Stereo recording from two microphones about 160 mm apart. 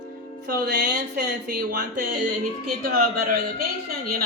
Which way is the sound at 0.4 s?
85° right.